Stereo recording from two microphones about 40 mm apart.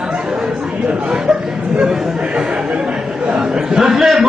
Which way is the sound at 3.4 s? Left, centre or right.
Right.